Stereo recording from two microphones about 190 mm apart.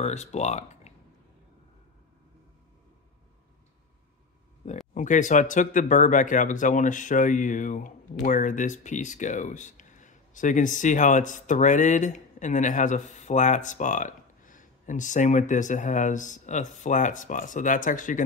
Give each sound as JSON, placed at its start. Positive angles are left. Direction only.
{"t": 0.0, "sound": "speech", "side_deg": 35}
{"t": 4.9, "sound": "speech", "side_deg": 40}